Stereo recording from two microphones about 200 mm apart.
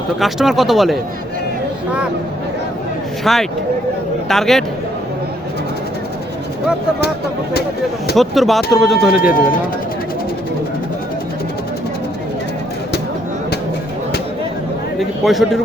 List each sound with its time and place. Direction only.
0.2 s speech: centre (ahead or behind)
3.3 s speech: centre (ahead or behind)
8.1 s speech: centre (ahead or behind)
9.3 s speech: 45° left (ahead or behind)
14.9 s speech: centre (ahead or behind)